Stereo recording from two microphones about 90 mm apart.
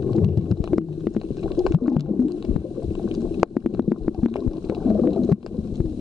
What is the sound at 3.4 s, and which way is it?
Stomach rumble, centre (ahead or behind).